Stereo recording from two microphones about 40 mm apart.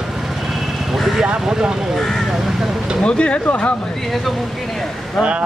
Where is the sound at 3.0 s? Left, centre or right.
Left.